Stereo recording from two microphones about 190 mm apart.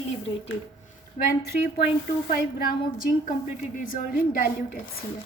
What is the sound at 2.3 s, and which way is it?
A woman's voice, 55° left (ahead or behind).